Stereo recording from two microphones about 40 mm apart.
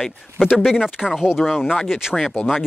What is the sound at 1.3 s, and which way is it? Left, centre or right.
Speech, centre.